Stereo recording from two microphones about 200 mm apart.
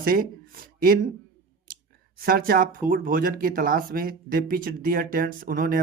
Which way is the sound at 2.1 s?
45° right (ahead or behind).